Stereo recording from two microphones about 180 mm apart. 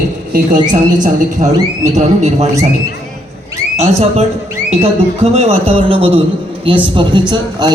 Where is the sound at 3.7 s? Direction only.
35° right (ahead or behind).